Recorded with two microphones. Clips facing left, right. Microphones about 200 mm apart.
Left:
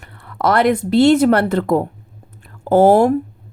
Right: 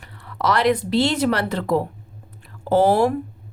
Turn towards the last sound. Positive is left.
turn(degrees=50)  # may be behind; listen again after turning